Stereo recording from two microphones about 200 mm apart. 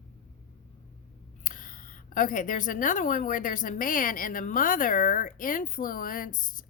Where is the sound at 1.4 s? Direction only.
40° left (ahead or behind).